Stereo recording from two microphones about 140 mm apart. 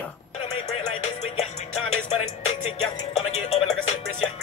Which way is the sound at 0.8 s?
50° left (ahead or behind).